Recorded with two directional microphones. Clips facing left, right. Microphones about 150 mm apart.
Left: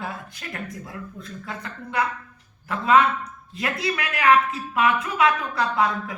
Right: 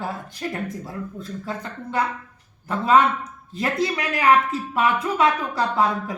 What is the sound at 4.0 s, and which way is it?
Speech, 30° right (ahead or behind).